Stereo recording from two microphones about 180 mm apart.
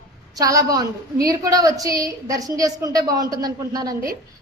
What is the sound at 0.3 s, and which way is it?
A woman's voice, 20° right (ahead or behind).